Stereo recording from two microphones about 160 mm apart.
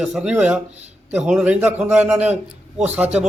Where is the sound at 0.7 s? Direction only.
45° right (ahead or behind).